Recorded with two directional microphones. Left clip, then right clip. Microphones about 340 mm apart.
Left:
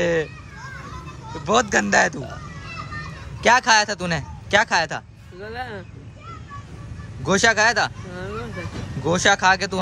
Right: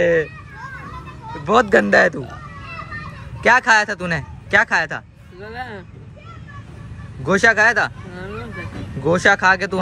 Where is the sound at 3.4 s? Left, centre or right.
Centre.